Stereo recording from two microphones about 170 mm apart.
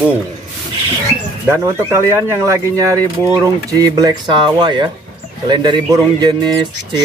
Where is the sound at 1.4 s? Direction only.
15° right (ahead or behind).